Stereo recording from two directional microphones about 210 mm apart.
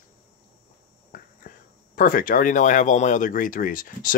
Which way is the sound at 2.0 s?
40° left (ahead or behind).